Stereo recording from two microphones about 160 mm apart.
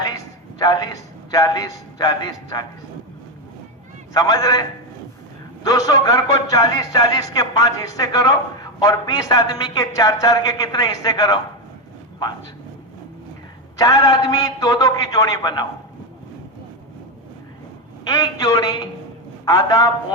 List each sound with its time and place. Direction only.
0.6 s speech: 25° left (ahead or behind)
4.1 s speech: 25° left (ahead or behind)
5.6 s speech: 25° left (ahead or behind)
13.7 s speech: 25° left (ahead or behind)
18.1 s speech: 25° left (ahead or behind)